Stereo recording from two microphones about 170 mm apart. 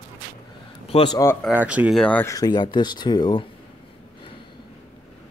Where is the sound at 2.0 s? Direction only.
10° left (ahead or behind).